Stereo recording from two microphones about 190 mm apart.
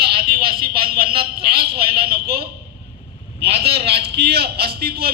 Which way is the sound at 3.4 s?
55° right (ahead or behind).